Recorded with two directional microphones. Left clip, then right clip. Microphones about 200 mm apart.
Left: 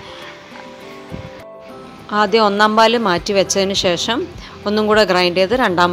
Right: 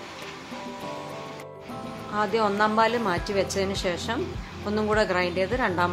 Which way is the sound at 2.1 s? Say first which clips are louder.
Left 11 dB; 40° left (ahead or behind).